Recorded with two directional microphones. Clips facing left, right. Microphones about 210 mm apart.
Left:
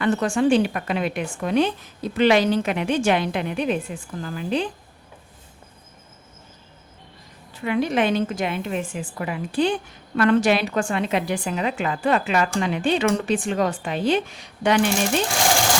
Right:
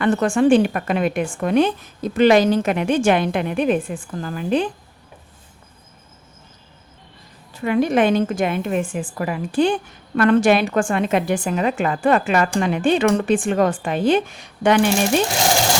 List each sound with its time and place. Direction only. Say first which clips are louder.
0.0 s speech: right 3 dB; 55° right (ahead or behind)
7.6 s speech: right 4 dB; 45° right (ahead or behind)